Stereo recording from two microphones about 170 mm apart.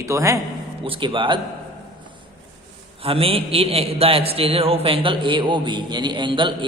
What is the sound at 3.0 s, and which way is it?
A man's voice, 35° right (ahead or behind).